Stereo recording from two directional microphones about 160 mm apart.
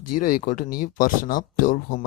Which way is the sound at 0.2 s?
60° left (ahead or behind).